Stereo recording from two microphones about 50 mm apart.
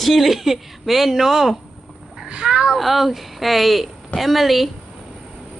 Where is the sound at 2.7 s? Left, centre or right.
Centre.